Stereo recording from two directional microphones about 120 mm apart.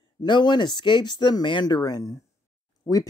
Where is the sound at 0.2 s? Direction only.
40° left (ahead or behind).